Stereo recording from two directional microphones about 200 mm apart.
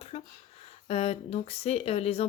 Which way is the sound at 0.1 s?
30° left (ahead or behind).